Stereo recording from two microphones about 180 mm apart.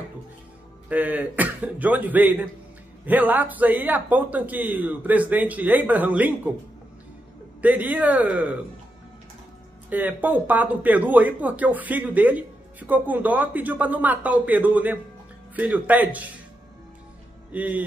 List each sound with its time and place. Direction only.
0.8 s speech: 10° right (ahead or behind)
7.6 s speech: 10° right (ahead or behind)
9.8 s speech: 10° right (ahead or behind)
17.5 s a man's voice: 10° right (ahead or behind)